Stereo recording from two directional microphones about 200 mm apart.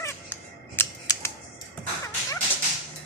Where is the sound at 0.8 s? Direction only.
15° left (ahead or behind).